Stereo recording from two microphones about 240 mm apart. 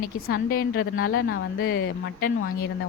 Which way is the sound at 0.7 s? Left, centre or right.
Left.